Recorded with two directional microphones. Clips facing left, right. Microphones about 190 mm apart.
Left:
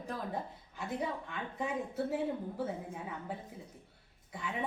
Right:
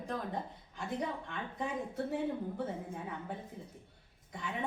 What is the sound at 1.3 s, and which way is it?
Speech, 5° left (ahead or behind).